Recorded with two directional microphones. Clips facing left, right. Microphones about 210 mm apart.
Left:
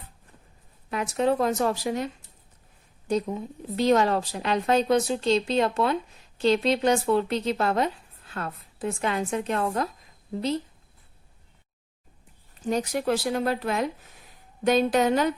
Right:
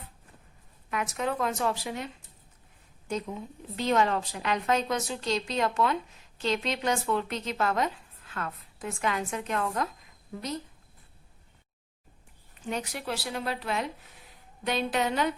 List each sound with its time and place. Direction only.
0.9 s a woman's voice: 35° left (ahead or behind)
3.1 s a woman's voice: 35° left (ahead or behind)
12.6 s speech: 40° left (ahead or behind)